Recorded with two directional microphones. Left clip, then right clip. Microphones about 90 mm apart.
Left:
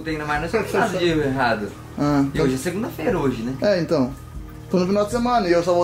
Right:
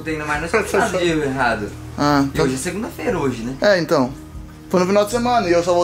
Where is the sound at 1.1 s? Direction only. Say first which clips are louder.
Right 1 dB; 35° left (ahead or behind).